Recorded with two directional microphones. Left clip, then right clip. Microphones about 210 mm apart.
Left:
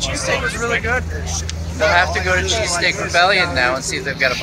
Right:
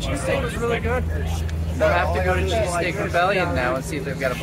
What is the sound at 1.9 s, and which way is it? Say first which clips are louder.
Speech: left 5 dB; 15° right (ahead or behind).